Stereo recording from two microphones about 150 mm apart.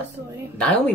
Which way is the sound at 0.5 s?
10° left (ahead or behind).